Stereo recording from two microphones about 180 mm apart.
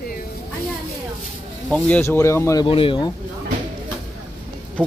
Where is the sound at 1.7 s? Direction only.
10° left (ahead or behind).